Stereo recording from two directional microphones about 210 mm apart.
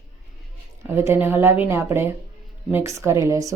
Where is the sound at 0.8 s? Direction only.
10° right (ahead or behind).